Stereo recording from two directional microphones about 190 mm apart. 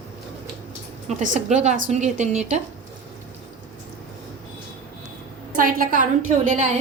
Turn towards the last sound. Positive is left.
turn(degrees=-40)  # may be behind; listen again after turning